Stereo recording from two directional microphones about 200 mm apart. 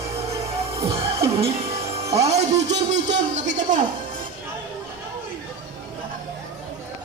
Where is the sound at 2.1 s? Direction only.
35° right (ahead or behind).